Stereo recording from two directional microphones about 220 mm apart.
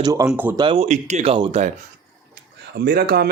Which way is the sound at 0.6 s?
25° right (ahead or behind).